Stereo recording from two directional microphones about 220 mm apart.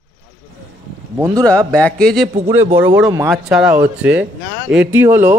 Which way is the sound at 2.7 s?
10° right (ahead or behind).